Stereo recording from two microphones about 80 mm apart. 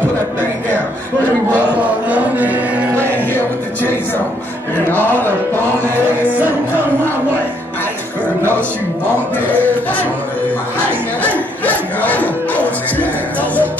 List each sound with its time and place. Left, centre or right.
1.5 s chant: centre
3.0 s music: left
6.3 s music: right
11.3 s music: centre